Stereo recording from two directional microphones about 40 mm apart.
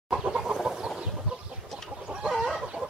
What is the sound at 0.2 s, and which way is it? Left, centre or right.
Chicken, right.